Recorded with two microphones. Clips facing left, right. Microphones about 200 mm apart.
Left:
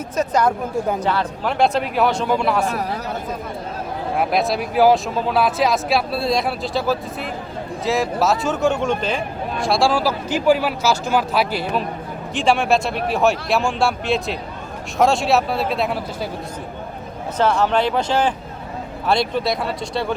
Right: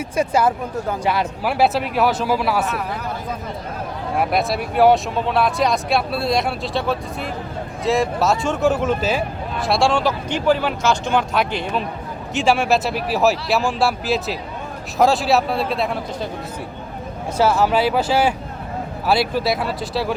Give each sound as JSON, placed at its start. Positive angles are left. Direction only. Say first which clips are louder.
{"t": 0.2, "sound": "speech", "louder": "even", "side_deg": -10}
{"t": 2.6, "sound": "speech", "louder": "left 2 dB", "side_deg": 40}
{"t": 4.2, "sound": "speech", "louder": "even", "side_deg": 0}
{"t": 17.3, "sound": "speech", "louder": "right 1 dB", "side_deg": -5}